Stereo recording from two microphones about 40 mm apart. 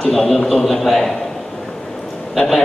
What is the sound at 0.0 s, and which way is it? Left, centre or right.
A man's voice, centre.